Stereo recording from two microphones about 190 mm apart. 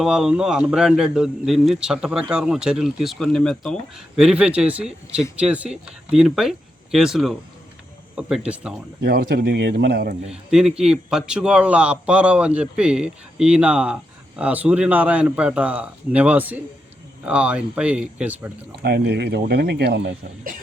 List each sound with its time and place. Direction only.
0.0 s a man's voice: 5° right (ahead or behind)
9.0 s speech: 55° right (ahead or behind)
10.5 s a man's voice: 5° right (ahead or behind)
18.8 s speech: 60° right (ahead or behind)